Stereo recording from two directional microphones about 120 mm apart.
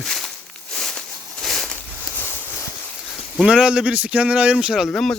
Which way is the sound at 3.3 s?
5° right (ahead or behind).